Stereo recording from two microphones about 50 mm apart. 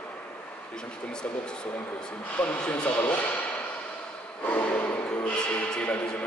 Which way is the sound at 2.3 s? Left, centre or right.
Left.